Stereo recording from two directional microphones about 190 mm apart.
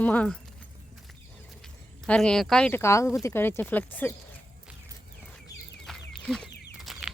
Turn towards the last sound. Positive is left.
turn(degrees=0)  # may be behind; listen again after turning